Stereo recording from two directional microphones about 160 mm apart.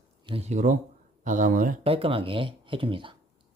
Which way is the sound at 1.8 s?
35° right (ahead or behind).